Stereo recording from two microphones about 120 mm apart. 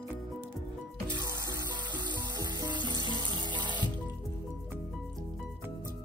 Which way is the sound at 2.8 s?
40° left (ahead or behind).